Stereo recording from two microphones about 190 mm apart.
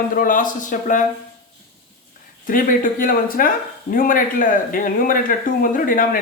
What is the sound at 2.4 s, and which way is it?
Speech, 45° left (ahead or behind).